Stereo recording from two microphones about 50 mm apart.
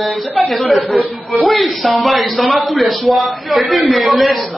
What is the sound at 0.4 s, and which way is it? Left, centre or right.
A woman's voice, centre.